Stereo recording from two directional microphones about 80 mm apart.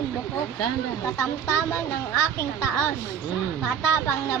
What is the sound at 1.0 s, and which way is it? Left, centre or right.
A woman's voice, left.